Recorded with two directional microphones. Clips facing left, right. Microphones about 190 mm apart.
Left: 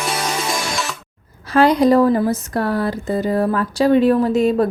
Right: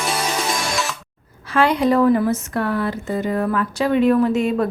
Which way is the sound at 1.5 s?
40° left (ahead or behind).